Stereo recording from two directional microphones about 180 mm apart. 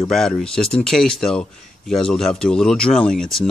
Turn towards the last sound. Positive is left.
turn(degrees=5)  # may be behind; listen again after turning